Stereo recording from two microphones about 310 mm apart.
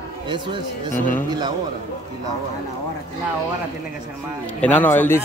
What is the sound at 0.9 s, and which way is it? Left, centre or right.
Speech, left.